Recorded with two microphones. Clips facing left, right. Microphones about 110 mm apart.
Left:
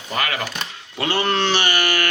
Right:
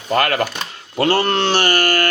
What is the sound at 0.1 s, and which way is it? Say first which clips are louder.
Speech: right 7 dB; 50° right (ahead or behind).